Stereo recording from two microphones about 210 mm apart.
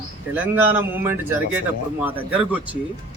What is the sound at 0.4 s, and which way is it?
A man's voice, 10° right (ahead or behind).